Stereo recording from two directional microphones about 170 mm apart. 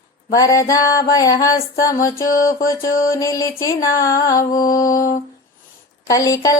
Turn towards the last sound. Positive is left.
turn(degrees=20)  # may be behind; listen again after turning